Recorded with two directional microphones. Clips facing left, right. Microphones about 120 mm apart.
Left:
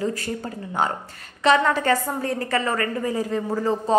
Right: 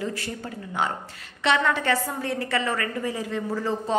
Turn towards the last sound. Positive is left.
turn(degrees=40)  # may be behind; listen again after turning